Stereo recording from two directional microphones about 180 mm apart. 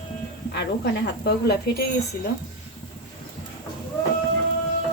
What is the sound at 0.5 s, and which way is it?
Speech, 65° left (ahead or behind).